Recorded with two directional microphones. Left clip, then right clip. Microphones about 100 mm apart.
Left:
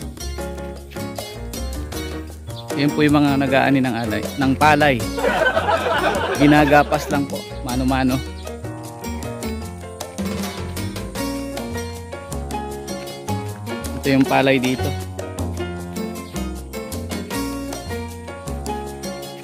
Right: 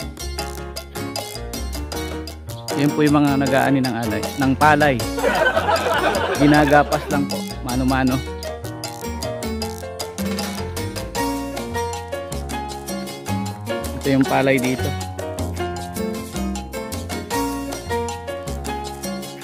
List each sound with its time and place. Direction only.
2.7 s speech: centre (ahead or behind)
3.0 s speech: 10° left (ahead or behind)
3.4 s speech: 25° left (ahead or behind)
4.0 s speech: 5° left (ahead or behind)
5.0 s speech: centre (ahead or behind)
6.5 s speech: 25° left (ahead or behind)
7.1 s speech: centre (ahead or behind)
9.0 s music: centre (ahead or behind)
11.1 s music: centre (ahead or behind)
12.9 s music: centre (ahead or behind)
14.3 s speech: 35° left (ahead or behind)
14.8 s music: centre (ahead or behind)